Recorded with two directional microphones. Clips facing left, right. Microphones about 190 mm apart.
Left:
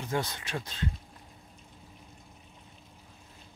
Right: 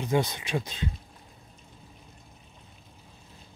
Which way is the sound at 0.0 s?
15° right (ahead or behind).